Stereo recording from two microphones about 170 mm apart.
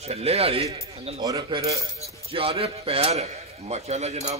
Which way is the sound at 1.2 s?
25° right (ahead or behind).